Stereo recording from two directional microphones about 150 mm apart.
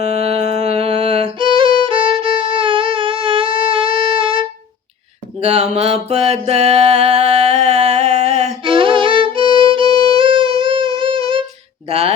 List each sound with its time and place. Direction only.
0.0 s music: 45° right (ahead or behind)
5.4 s music: 45° right (ahead or behind)
8.6 s music: 35° right (ahead or behind)
11.9 s a sound: 45° right (ahead or behind)